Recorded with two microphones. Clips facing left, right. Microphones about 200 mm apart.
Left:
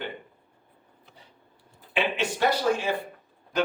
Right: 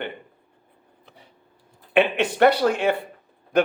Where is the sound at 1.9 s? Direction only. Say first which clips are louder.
Right 7 dB; 60° right (ahead or behind).